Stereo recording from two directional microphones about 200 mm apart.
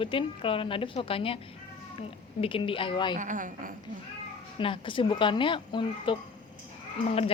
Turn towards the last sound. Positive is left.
turn(degrees=30)  # may be behind; listen again after turning